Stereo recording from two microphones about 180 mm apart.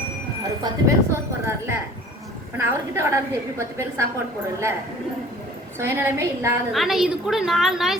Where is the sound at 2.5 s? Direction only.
15° right (ahead or behind).